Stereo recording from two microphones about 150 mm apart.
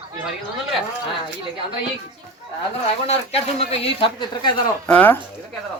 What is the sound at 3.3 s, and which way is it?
Speech, 40° left (ahead or behind).